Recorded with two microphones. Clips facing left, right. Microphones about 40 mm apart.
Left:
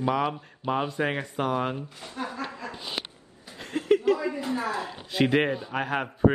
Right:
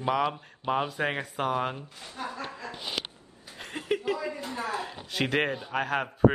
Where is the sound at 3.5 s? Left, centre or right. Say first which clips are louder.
Left 7 dB; centre.